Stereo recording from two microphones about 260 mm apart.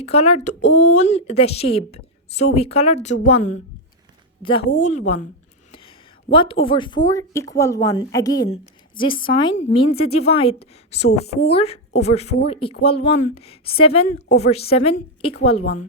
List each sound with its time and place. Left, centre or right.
0.0 s speech: left
6.3 s speech: centre